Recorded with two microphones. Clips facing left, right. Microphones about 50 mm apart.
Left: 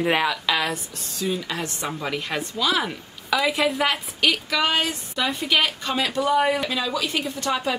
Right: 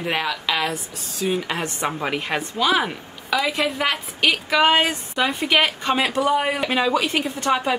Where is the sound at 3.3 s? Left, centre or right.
Centre.